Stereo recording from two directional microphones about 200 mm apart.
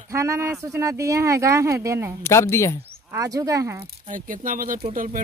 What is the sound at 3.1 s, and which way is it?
Speech, 15° right (ahead or behind).